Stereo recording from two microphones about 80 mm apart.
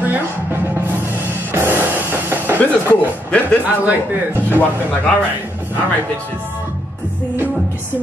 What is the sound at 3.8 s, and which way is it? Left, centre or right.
Speech, right.